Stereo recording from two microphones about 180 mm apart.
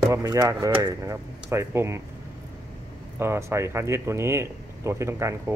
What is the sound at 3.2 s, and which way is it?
Speech, 15° right (ahead or behind).